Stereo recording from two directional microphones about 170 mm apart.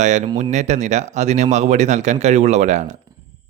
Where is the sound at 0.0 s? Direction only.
45° right (ahead or behind).